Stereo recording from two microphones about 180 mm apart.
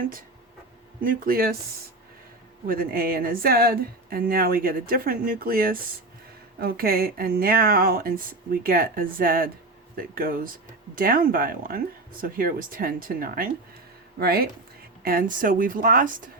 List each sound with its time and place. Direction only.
1.0 s speech: 55° right (ahead or behind)
2.6 s speech: 55° right (ahead or behind)